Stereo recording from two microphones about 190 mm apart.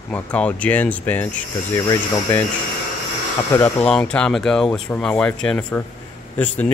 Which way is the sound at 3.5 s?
5° left (ahead or behind).